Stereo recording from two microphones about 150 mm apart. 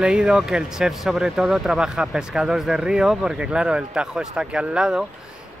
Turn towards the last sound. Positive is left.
turn(degrees=-5)  # may be behind; listen again after turning